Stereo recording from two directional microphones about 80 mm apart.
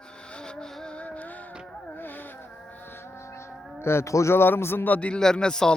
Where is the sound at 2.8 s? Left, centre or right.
Left.